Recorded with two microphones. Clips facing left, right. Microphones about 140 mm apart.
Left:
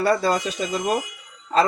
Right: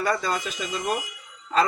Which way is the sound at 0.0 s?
35° left (ahead or behind).